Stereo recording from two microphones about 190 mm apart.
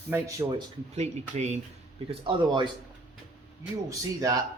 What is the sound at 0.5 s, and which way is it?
A man's voice, 35° right (ahead or behind).